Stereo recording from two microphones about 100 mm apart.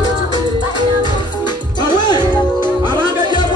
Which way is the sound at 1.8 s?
45° left (ahead or behind).